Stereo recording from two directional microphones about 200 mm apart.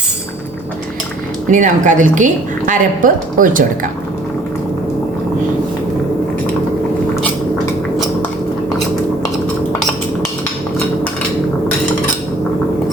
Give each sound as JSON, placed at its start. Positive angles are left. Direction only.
{"t": 1.5, "sound": "a woman's voice", "side_deg": -40}